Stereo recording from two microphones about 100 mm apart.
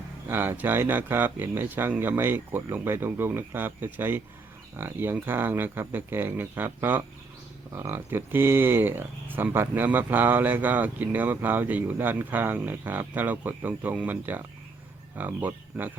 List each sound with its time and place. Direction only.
0.3 s speech: 20° right (ahead or behind)